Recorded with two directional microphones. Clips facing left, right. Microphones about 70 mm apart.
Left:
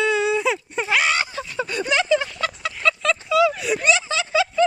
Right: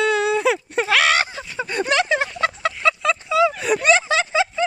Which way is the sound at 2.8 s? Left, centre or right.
Centre.